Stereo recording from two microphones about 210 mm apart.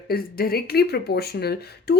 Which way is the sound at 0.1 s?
45° left (ahead or behind).